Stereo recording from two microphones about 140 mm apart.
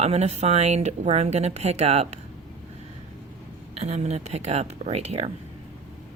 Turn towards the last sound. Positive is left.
turn(degrees=-50)  # may be behind; listen again after turning